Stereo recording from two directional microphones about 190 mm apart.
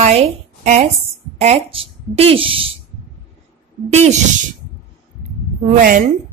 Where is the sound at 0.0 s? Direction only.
35° right (ahead or behind).